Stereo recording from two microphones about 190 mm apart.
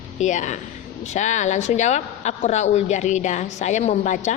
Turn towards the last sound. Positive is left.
turn(degrees=40)  # may be behind; listen again after turning